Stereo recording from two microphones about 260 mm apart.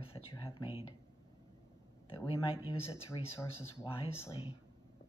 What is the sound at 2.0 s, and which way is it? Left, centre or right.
Speech, centre.